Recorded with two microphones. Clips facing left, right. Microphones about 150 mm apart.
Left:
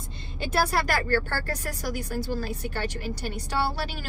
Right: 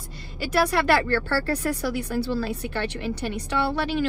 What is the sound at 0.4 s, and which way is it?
Speech, 30° left (ahead or behind).